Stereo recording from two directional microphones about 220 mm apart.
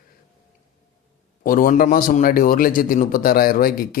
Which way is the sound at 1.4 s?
40° left (ahead or behind).